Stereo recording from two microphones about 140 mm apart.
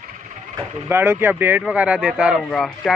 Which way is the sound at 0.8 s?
15° right (ahead or behind).